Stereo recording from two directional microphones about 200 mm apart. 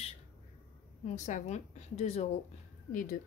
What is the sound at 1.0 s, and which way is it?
A woman's voice, 35° left (ahead or behind).